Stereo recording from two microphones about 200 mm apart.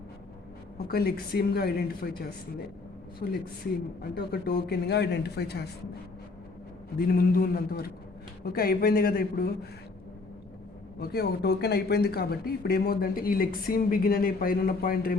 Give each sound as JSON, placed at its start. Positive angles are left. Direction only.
{"t": 0.9, "sound": "speech", "side_deg": 50}
{"t": 7.1, "sound": "speech", "side_deg": 50}
{"t": 11.0, "sound": "speech", "side_deg": 55}